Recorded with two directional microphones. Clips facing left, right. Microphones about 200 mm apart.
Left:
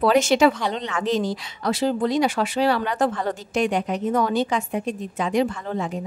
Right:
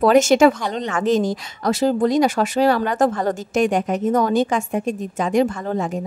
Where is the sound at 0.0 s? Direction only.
45° right (ahead or behind).